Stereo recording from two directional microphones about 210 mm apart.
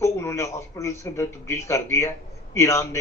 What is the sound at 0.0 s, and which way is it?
A man's voice, 15° left (ahead or behind).